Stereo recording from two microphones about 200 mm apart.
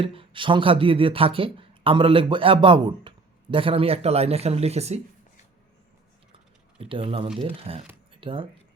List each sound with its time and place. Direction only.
0.0 s speech: 25° right (ahead or behind)
6.7 s speech: 25° right (ahead or behind)